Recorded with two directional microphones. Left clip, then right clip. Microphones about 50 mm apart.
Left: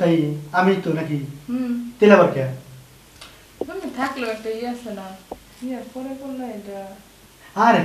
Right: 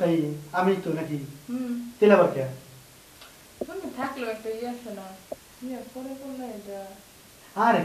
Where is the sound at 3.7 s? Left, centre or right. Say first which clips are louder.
Left 7 dB; left.